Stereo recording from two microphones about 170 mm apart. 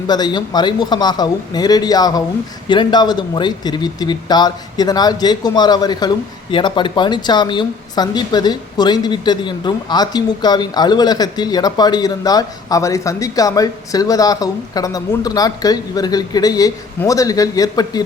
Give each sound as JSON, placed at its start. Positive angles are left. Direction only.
{"t": 0.1, "sound": "speech", "side_deg": 25}